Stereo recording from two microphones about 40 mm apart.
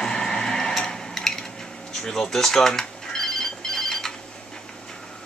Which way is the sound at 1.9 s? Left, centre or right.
Centre.